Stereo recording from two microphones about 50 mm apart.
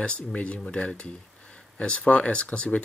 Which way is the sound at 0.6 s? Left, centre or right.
Centre.